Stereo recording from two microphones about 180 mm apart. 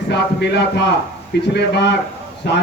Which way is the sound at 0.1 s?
70° left (ahead or behind).